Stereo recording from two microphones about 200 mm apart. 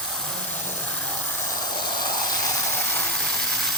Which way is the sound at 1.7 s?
20° left (ahead or behind).